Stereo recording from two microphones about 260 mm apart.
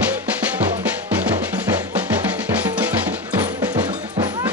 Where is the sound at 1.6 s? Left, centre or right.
Centre.